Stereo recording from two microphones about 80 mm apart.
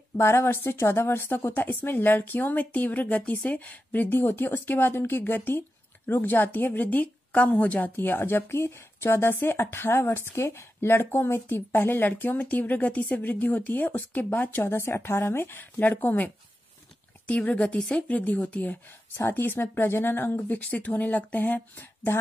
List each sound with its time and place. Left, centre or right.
0.2 s a woman's voice: left
17.3 s a woman's voice: centre